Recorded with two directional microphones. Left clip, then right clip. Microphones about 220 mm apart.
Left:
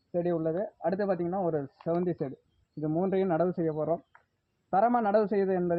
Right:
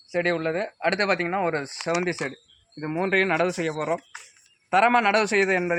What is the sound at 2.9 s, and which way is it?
Speech, 5° right (ahead or behind).